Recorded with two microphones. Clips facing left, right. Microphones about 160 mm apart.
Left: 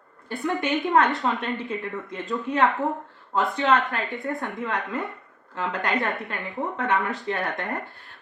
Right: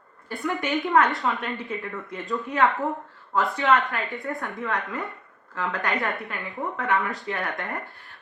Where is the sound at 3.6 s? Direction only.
20° left (ahead or behind).